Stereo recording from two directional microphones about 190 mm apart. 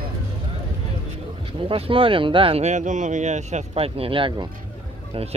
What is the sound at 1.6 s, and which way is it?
Speech, 30° right (ahead or behind).